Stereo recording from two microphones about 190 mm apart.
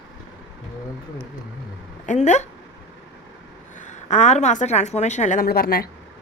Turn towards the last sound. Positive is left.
turn(degrees=55)  # may be behind; listen again after turning